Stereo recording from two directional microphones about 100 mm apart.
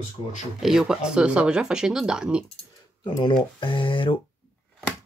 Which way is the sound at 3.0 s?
50° left (ahead or behind).